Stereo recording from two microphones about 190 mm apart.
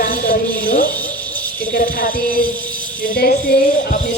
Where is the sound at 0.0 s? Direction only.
50° left (ahead or behind).